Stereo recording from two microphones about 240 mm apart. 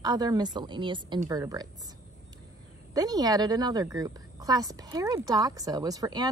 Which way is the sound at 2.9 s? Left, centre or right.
Centre.